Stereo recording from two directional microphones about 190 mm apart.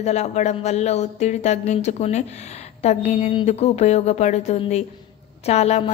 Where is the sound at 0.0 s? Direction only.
35° left (ahead or behind).